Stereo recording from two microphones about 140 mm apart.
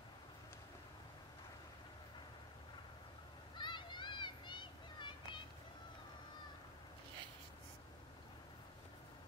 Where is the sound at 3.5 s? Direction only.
35° left (ahead or behind).